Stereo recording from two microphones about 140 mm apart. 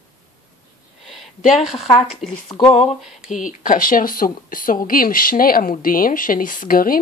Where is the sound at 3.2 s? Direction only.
65° left (ahead or behind); by 7.0 s 90° left.